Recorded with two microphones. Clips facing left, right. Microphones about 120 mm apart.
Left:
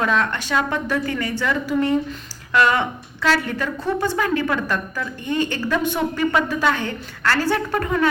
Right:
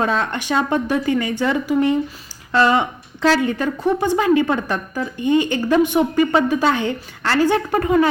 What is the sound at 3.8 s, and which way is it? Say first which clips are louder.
A woman's voice: right 6 dB; 15° right (ahead or behind).